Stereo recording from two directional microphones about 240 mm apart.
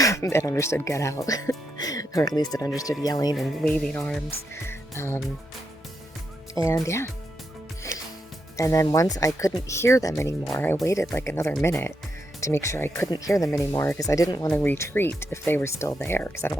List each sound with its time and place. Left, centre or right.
0.0 s speech: centre
3.3 s music: centre
6.7 s speech: centre
7.9 s music: right
8.5 s speech: centre